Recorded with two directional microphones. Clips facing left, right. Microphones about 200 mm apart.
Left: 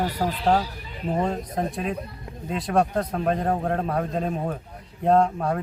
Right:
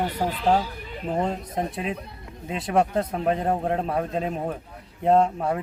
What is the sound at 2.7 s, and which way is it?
A man's voice, 5° right (ahead or behind).